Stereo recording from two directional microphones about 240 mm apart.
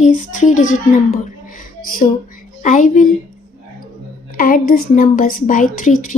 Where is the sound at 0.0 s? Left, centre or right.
Left.